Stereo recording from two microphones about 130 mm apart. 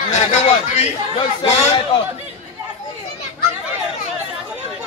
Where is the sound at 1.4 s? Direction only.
40° left (ahead or behind).